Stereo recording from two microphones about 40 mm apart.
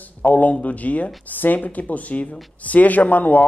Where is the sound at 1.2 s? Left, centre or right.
Left.